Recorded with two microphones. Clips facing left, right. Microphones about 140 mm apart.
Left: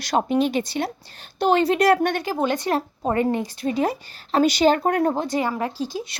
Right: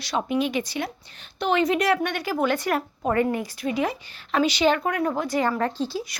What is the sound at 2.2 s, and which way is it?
A woman's voice, 25° left (ahead or behind).